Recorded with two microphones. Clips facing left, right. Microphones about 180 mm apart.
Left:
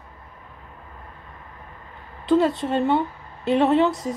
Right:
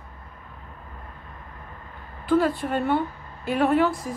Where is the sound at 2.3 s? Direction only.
20° left (ahead or behind).